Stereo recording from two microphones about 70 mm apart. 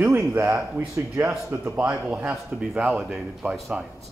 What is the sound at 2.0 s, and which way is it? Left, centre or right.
A man's voice, centre.